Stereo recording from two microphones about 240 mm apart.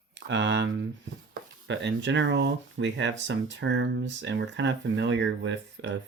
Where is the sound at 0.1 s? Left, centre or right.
Right.